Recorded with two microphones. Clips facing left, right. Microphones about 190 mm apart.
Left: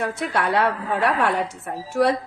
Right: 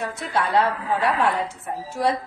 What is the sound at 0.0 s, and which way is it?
A woman's voice, 65° left (ahead or behind).